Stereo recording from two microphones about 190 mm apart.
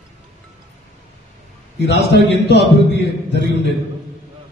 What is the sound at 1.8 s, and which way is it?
Music, 60° left (ahead or behind).